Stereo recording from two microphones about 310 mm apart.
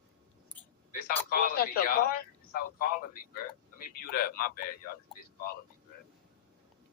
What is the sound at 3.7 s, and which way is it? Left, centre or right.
Speech, left.